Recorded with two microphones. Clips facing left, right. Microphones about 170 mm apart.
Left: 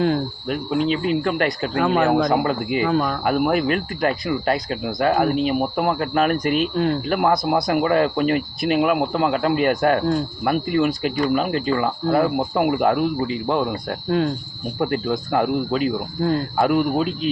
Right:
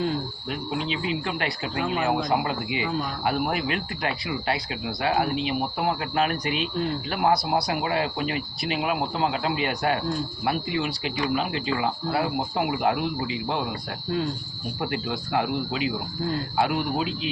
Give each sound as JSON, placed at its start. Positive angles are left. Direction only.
{"t": 0.0, "sound": "speech", "side_deg": 60}
{"t": 6.7, "sound": "speech", "side_deg": 60}
{"t": 16.2, "sound": "speech", "side_deg": 70}
{"t": 16.6, "sound": "speech", "side_deg": 45}